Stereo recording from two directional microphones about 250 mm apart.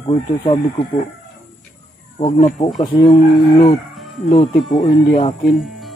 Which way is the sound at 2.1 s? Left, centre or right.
Left.